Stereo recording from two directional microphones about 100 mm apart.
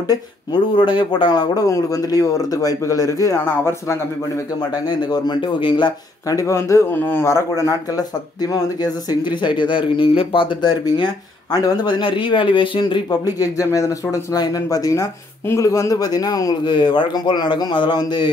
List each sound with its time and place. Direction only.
0.5 s speech: 50° left (ahead or behind); by 4.0 s 25° left (ahead or behind)
4.6 s a man's voice: 45° left (ahead or behind)
6.2 s speech: 30° left (ahead or behind)
12.0 s speech: 55° left (ahead or behind)
13.1 s speech: 35° left (ahead or behind)
16.7 s a man's voice: 50° left (ahead or behind)